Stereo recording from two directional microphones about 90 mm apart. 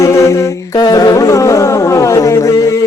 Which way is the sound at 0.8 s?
45° left (ahead or behind).